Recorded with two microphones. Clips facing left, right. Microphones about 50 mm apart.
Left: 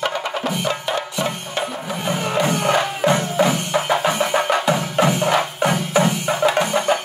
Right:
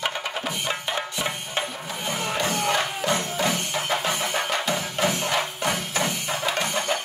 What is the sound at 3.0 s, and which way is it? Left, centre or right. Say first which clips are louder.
Music: left 10 dB; left.